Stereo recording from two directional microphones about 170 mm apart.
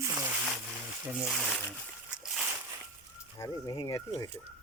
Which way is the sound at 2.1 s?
5° right (ahead or behind).